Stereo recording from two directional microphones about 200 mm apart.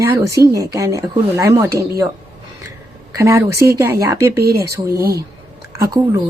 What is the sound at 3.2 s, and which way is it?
Speech, 15° right (ahead or behind).